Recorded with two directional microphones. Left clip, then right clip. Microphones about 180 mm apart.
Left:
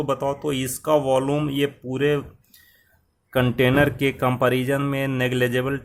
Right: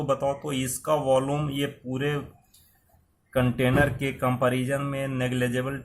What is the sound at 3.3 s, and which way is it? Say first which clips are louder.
Speech: left 5 dB; 55° left (ahead or behind).